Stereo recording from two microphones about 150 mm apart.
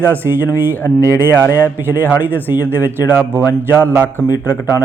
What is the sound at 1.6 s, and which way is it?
Speech, 15° right (ahead or behind).